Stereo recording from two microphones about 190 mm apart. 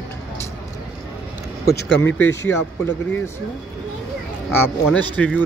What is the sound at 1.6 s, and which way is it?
Speech, 70° left (ahead or behind).